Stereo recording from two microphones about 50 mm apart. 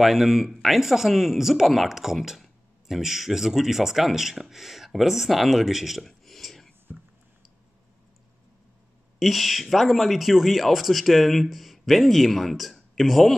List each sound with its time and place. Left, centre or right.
0.0 s speech: centre
6.9 s a sound: centre
9.2 s speech: centre